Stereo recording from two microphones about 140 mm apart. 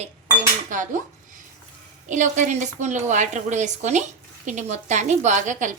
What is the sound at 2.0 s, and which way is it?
A woman's voice, 60° right (ahead or behind).